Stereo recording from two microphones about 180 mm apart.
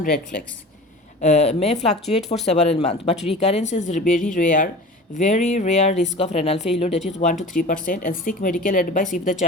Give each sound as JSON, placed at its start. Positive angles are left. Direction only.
{"t": 1.2, "sound": "speech", "side_deg": 40}